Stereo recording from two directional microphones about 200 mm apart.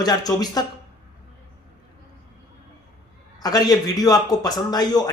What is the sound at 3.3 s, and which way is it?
A man's voice, 20° left (ahead or behind).